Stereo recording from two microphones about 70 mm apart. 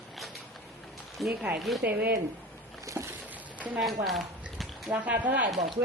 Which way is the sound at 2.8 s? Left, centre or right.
Right.